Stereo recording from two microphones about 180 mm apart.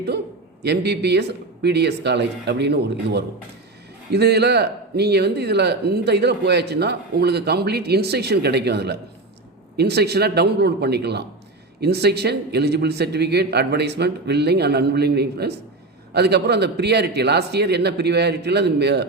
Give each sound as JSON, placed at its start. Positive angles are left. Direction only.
{"t": 0.6, "sound": "a man's voice", "side_deg": -65}